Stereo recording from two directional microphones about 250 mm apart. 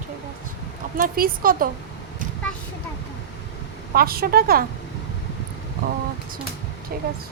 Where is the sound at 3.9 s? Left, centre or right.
Right.